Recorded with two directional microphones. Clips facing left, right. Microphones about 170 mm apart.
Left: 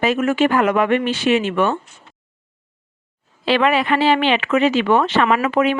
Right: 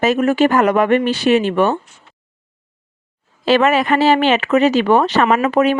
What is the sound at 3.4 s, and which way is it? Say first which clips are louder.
A woman's voice: right 3 dB; 45° right (ahead or behind).